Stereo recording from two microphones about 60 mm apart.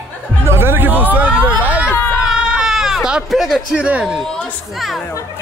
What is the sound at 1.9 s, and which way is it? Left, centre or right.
Hubbub, left.